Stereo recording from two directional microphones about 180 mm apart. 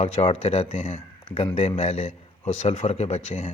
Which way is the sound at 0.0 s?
35° left (ahead or behind).